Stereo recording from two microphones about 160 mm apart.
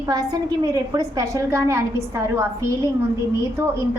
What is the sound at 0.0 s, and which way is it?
A woman's voice, 25° right (ahead or behind).